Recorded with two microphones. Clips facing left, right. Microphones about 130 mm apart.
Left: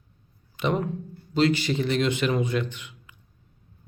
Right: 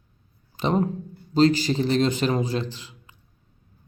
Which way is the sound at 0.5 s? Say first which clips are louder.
Right 3 dB; 35° right (ahead or behind).